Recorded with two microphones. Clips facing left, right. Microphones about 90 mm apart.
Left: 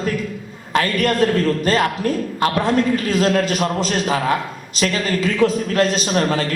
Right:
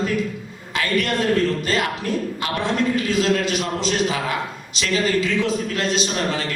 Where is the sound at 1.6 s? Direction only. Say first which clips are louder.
Left 5 dB; 45° left (ahead or behind).